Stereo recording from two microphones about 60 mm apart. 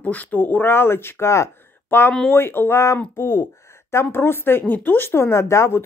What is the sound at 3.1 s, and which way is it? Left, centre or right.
Speech, left.